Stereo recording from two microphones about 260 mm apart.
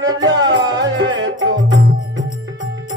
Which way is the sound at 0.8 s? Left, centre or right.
Right.